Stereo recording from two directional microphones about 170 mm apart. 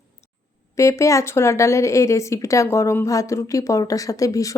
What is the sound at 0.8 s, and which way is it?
A woman's voice, 20° left (ahead or behind).